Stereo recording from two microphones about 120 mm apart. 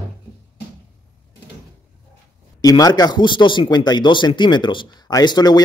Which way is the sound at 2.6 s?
30° left (ahead or behind).